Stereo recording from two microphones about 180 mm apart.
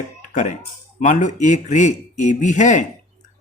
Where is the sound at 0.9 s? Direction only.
45° left (ahead or behind).